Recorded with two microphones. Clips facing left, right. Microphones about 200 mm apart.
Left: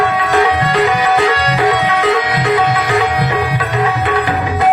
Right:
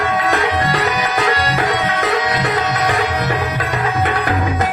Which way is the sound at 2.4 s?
45° right (ahead or behind).